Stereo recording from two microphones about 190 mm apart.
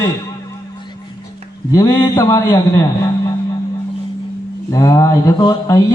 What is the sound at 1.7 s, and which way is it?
A man's voice, 15° left (ahead or behind).